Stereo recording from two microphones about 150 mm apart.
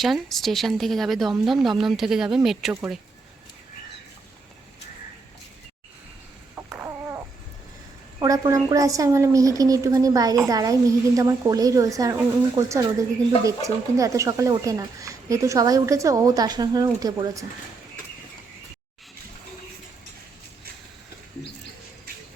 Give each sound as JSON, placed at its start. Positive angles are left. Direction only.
{"t": 0.0, "sound": "speech", "side_deg": 0}
{"t": 6.7, "sound": "a sound", "side_deg": -15}
{"t": 8.2, "sound": "speech", "side_deg": -20}